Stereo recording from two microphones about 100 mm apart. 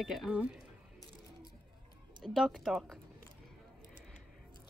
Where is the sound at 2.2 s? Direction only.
Centre (ahead or behind).